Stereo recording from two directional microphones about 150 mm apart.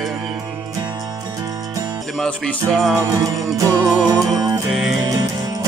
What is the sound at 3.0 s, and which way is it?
Music, 25° right (ahead or behind).